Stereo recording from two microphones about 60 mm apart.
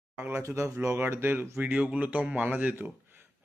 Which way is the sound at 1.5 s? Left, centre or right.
Right.